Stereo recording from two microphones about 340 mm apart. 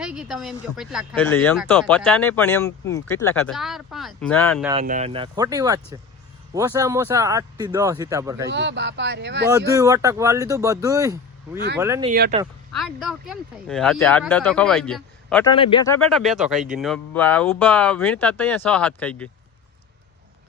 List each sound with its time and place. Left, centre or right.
0.0 s speech: centre
4.7 s speech: centre
8.4 s speech: right
9.5 s speech: centre
12.1 s speech: right
12.7 s speech: centre
15.5 s speech: centre